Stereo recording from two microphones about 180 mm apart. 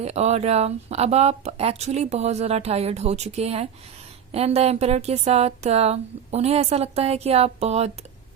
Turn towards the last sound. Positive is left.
turn(degrees=-35)  # may be behind; listen again after turning